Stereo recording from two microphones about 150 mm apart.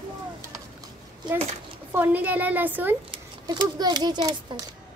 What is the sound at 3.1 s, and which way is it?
A child's voice, 30° right (ahead or behind).